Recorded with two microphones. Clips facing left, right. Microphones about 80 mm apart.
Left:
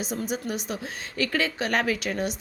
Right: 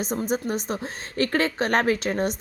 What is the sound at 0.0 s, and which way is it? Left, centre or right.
A woman's voice, right.